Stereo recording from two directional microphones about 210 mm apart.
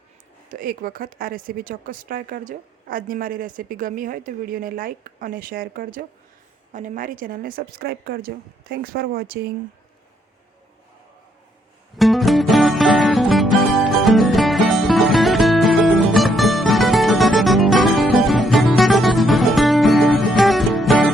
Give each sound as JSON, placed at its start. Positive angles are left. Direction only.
{"t": 0.4, "sound": "speech", "side_deg": -40}
{"t": 11.9, "sound": "music", "side_deg": 0}